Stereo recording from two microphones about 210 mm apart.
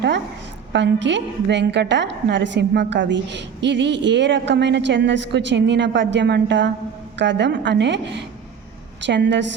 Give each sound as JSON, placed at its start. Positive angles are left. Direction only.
{"t": 0.7, "sound": "a woman's voice", "side_deg": -60}